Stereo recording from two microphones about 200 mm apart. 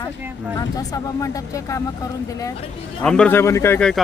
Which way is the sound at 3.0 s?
5° left (ahead or behind).